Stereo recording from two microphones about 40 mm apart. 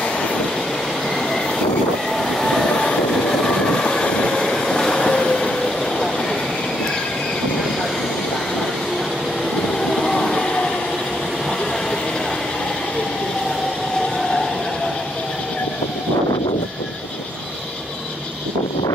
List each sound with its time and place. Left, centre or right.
2.1 s train: centre
9.9 s music: centre